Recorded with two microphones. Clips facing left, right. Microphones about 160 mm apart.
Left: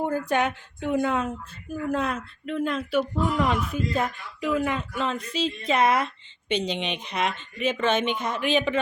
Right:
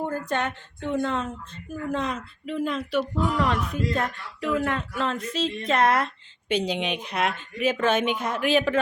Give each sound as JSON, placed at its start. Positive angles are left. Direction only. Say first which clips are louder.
{"t": 0.0, "sound": "a woman's voice", "louder": "left 3 dB", "side_deg": 15}